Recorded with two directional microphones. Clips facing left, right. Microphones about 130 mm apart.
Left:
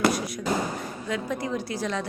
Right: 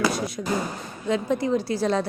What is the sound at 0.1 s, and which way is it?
A woman's voice, 25° right (ahead or behind).